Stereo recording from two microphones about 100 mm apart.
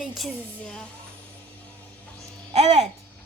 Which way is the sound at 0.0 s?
5° right (ahead or behind).